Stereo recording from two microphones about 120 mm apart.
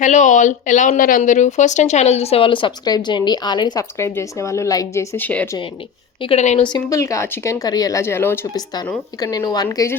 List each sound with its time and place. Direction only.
0.0 s speech: 90° left; by 3.8 s 35° left (ahead or behind)
3.9 s speech: 25° left (ahead or behind)
5.1 s a woman's voice: 15° left (ahead or behind)
6.2 s speech: 70° left (ahead or behind)
6.6 s speech: 40° left (ahead or behind)
6.9 s speech: 25° left (ahead or behind)
9.2 s speech: 35° left (ahead or behind)
9.7 s speech: 20° left (ahead or behind)